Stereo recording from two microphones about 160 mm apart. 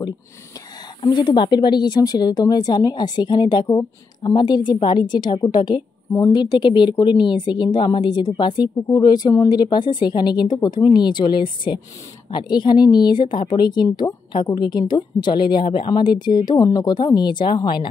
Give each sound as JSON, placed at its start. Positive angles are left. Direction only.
{"t": 1.0, "sound": "a woman's voice", "side_deg": 30}